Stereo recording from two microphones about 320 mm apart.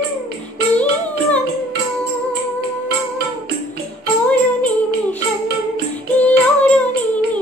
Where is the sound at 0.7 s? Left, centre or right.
Centre.